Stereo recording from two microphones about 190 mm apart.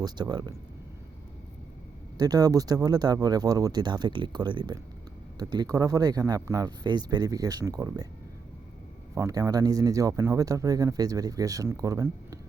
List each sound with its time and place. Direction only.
0.0 s speech: 20° right (ahead or behind)
2.1 s speech: 20° right (ahead or behind)
9.1 s speech: 15° right (ahead or behind)